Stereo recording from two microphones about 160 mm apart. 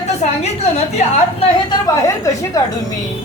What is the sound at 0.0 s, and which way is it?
A woman's voice, 45° left (ahead or behind).